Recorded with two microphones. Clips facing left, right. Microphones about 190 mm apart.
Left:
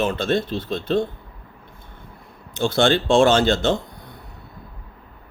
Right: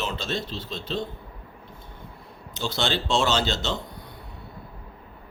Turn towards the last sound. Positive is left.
turn(degrees=50)  # may be behind; listen again after turning